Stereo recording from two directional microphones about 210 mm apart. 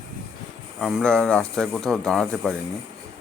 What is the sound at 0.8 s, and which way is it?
Speech, 5° left (ahead or behind).